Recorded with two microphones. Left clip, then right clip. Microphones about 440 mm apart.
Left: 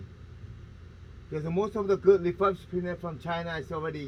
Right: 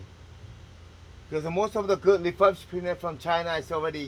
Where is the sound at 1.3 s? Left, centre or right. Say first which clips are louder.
Right 4 dB; right.